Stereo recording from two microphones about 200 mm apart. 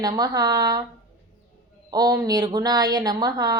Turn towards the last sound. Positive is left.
turn(degrees=-20)  # may be behind; listen again after turning